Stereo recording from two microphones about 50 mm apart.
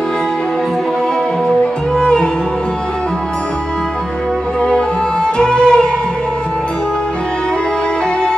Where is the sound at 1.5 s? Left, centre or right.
Centre.